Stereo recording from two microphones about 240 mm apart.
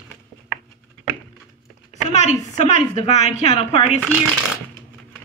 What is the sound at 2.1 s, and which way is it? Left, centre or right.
A woman's voice, left.